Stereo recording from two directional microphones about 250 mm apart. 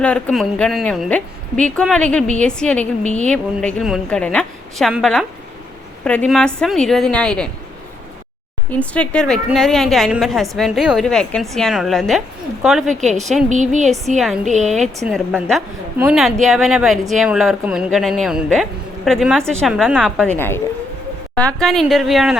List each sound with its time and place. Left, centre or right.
0.0 s a woman's voice: centre
8.7 s a woman's voice: centre
13.0 s a woman's voice: right
15.0 s a woman's voice: centre